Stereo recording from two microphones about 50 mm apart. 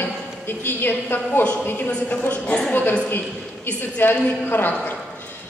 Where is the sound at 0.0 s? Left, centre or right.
Left.